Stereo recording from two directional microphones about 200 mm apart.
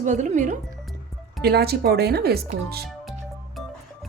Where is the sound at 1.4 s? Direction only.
50° right (ahead or behind).